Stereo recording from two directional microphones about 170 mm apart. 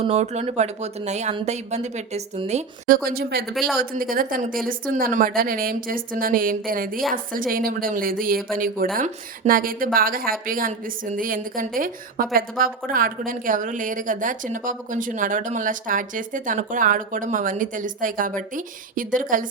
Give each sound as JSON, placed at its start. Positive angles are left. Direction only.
{"t": 0.0, "sound": "speech", "side_deg": -40}
{"t": 3.5, "sound": "speech", "side_deg": 0}
{"t": 3.8, "sound": "a woman's voice", "side_deg": -55}